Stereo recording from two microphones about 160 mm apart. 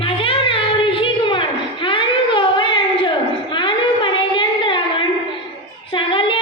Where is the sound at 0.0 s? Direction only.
35° left (ahead or behind).